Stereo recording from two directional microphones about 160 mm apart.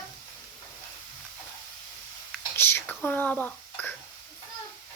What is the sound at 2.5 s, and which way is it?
Whispering, 15° left (ahead or behind).